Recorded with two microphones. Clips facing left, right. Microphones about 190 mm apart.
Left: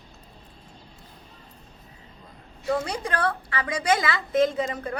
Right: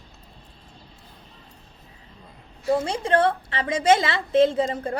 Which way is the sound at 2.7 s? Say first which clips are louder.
Right 5 dB; 25° right (ahead or behind).